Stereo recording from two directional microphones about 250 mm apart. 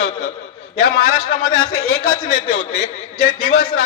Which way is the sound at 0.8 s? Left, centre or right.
Left.